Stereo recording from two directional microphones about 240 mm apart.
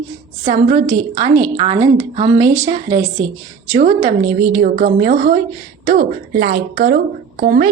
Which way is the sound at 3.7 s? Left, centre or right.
Right.